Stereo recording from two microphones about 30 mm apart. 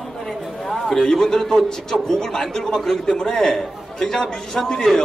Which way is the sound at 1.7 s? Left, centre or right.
Centre.